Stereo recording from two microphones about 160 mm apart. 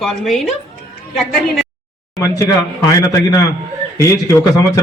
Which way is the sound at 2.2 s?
20° left (ahead or behind).